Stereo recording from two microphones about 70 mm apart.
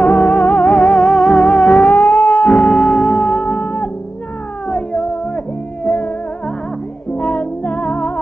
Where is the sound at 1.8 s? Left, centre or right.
Left.